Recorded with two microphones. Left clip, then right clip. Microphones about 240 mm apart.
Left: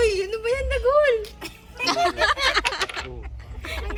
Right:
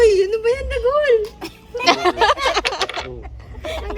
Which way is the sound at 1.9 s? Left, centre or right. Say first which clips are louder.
Right 4 dB; right.